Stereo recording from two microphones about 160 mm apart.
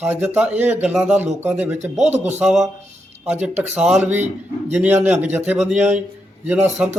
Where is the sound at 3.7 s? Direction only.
5° right (ahead or behind).